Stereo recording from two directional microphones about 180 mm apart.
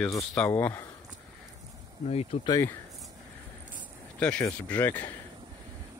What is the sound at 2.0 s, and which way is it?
Speech, 35° left (ahead or behind).